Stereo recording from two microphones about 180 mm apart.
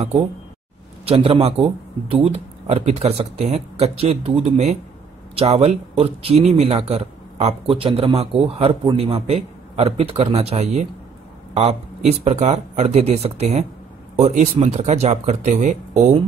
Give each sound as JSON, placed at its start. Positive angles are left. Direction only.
{"t": 1.0, "sound": "speech", "side_deg": -35}